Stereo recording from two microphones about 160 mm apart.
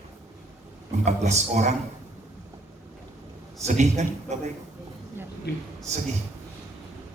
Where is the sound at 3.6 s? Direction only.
45° right (ahead or behind).